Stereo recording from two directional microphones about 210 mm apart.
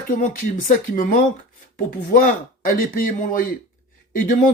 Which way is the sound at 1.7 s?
40° left (ahead or behind).